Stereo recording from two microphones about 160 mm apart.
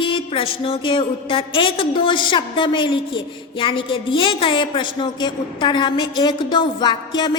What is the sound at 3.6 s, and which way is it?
A woman's voice, 30° left (ahead or behind).